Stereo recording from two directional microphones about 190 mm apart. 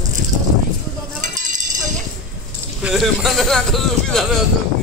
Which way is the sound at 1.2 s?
40° right (ahead or behind).